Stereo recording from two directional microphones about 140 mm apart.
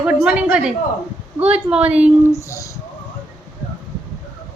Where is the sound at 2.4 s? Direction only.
20° left (ahead or behind).